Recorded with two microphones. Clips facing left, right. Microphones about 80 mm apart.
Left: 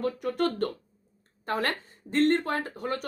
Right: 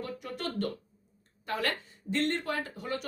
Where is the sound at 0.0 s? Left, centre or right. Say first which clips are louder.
Left 9 dB; left.